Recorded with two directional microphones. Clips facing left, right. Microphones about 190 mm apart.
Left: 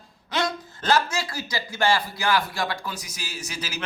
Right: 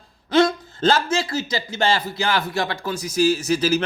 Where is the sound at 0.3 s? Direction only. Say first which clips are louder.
Right 10 dB; 25° right (ahead or behind).